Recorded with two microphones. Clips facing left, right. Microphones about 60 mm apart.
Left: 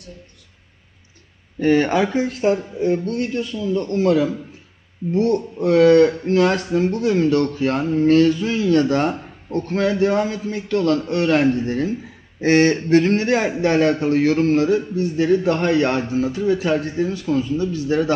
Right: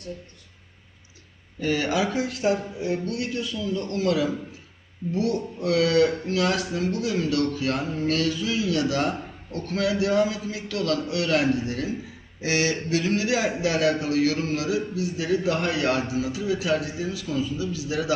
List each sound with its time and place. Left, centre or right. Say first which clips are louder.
1.5 s a man's voice: left 8 dB; left